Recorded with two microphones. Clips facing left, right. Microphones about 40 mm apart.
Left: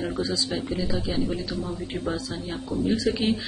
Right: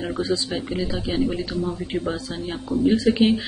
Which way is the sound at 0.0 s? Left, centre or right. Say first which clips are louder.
Right 3 dB; right.